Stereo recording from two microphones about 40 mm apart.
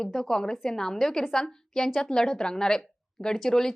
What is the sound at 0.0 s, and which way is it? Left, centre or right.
A woman's voice, centre.